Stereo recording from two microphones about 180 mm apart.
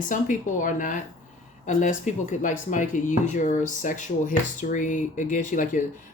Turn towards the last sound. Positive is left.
turn(degrees=45)  # may be behind; listen again after turning